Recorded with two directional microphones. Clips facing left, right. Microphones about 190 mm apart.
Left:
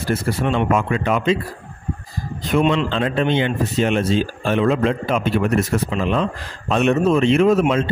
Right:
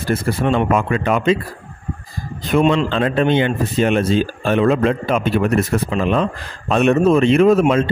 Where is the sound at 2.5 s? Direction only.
45° right (ahead or behind).